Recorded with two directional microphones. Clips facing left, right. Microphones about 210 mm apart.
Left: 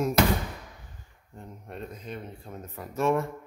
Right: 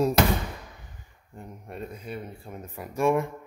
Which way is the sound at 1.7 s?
10° right (ahead or behind).